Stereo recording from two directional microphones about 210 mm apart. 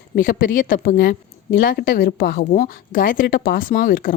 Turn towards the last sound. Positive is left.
turn(degrees=45)  # may be behind; listen again after turning